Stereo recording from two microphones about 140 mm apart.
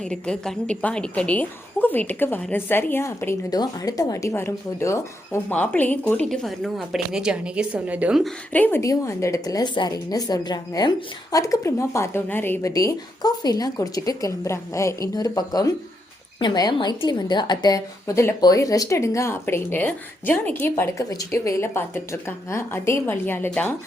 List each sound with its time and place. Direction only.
0.0 s speech: 5° left (ahead or behind)
3.5 s speech: 25° left (ahead or behind); by 8.2 s 10° right (ahead or behind)
8.5 s a woman's voice: 10° left (ahead or behind)